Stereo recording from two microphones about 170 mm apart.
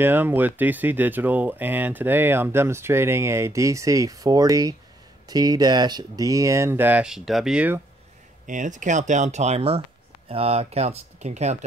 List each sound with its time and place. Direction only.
0.0 s speech: 10° right (ahead or behind)
8.5 s speech: 50° right (ahead or behind)